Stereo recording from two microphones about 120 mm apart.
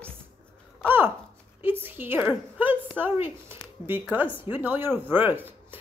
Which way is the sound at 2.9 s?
20° right (ahead or behind).